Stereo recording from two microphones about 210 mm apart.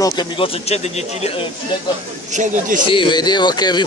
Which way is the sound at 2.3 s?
35° right (ahead or behind).